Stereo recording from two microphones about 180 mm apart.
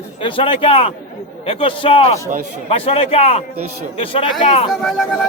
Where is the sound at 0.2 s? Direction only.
30° left (ahead or behind).